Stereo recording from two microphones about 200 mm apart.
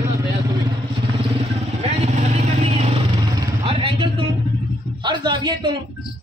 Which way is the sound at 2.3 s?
35° right (ahead or behind).